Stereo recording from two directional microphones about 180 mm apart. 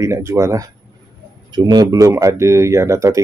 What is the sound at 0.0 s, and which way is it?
Speech, 15° right (ahead or behind).